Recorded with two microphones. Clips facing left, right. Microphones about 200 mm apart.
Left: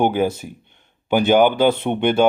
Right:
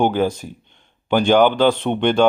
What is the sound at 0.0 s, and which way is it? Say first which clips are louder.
Speech: even; 10° left (ahead or behind).